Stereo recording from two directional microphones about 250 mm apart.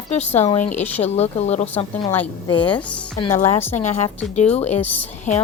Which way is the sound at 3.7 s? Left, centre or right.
Left.